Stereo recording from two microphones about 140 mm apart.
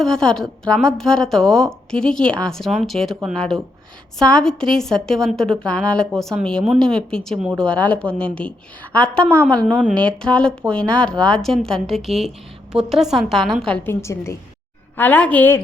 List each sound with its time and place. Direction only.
0.0 s a woman's voice: 5° left (ahead or behind)
13.8 s a woman's voice: 20° left (ahead or behind)